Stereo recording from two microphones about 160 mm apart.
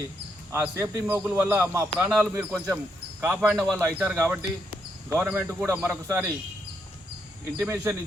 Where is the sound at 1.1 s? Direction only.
10° right (ahead or behind).